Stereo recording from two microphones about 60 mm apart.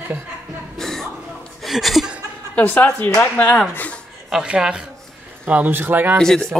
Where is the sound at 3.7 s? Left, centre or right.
Left.